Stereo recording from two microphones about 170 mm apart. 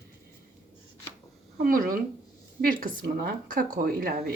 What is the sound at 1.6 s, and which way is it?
Speech, 55° right (ahead or behind).